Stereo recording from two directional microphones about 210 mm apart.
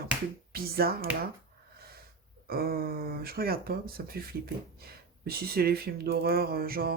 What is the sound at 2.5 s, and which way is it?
Speech, 45° right (ahead or behind).